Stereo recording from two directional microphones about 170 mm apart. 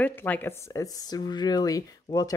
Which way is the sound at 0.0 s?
10° left (ahead or behind).